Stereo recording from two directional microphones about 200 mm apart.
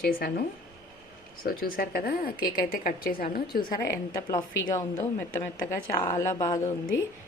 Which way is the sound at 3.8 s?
20° left (ahead or behind).